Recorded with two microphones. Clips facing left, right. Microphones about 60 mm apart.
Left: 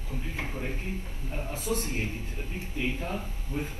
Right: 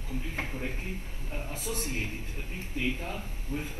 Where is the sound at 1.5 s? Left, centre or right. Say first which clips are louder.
Left 4 dB; left.